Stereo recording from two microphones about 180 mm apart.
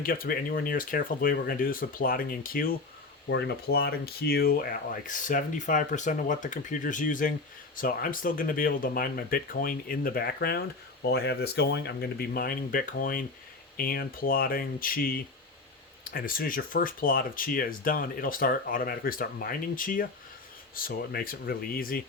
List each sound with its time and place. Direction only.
0.0 s speech: 50° left (ahead or behind)
3.2 s speech: 70° left (ahead or behind); by 22.0 s 55° left (ahead or behind)